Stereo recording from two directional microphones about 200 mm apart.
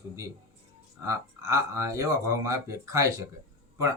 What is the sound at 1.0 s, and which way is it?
A man's voice, 15° right (ahead or behind).